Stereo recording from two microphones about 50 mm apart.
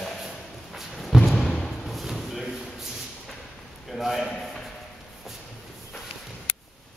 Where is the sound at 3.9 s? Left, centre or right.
Centre.